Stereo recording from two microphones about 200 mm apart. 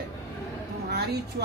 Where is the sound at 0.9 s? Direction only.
55° right (ahead or behind).